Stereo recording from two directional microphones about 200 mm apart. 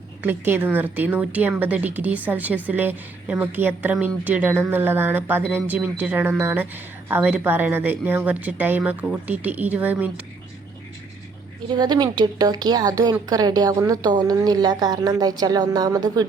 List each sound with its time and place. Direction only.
0.2 s a woman's voice: 10° right (ahead or behind)
11.7 s a woman's voice: 20° right (ahead or behind)